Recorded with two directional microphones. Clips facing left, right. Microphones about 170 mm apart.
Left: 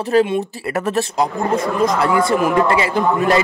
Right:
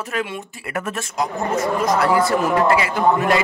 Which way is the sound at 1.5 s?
25° right (ahead or behind).